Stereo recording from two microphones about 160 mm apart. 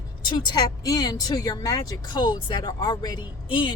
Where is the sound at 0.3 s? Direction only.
25° left (ahead or behind).